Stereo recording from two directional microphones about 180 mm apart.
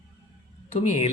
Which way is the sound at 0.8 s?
35° left (ahead or behind).